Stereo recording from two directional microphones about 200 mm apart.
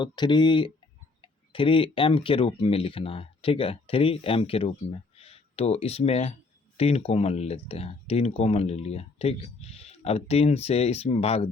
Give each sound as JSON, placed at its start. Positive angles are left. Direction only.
{"t": 0.0, "sound": "speech", "side_deg": 20}